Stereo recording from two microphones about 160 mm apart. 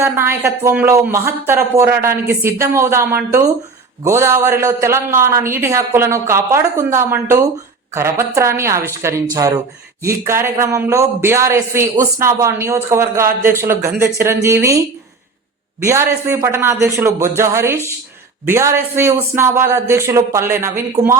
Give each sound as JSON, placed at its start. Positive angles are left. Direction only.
{"t": 0.0, "sound": "a man's voice", "side_deg": -15}